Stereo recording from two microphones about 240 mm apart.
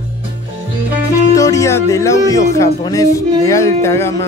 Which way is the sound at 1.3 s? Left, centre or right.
Centre.